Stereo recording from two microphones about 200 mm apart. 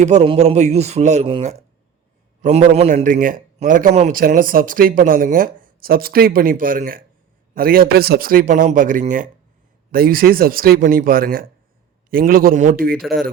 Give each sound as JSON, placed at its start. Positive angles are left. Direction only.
{"t": 0.0, "sound": "a man's voice", "side_deg": -35}